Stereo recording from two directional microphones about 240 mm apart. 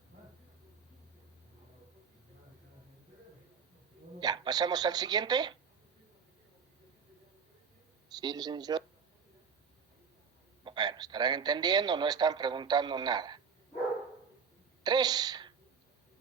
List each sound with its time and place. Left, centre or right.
4.2 s a man's voice: centre
8.1 s a man's voice: centre
10.6 s a man's voice: centre
14.8 s speech: centre